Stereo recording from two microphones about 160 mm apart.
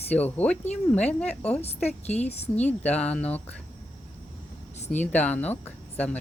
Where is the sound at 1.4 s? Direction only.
40° left (ahead or behind).